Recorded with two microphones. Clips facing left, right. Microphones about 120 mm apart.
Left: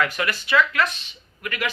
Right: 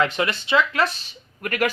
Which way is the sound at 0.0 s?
25° right (ahead or behind).